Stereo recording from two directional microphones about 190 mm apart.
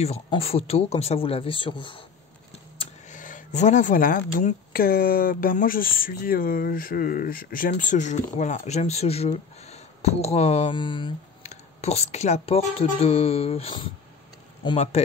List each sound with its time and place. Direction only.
0.0 s speech: 30° left (ahead or behind)
2.8 s speech: 40° left (ahead or behind)